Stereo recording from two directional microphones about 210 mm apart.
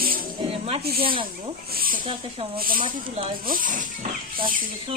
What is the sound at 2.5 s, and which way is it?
Speech, 45° right (ahead or behind).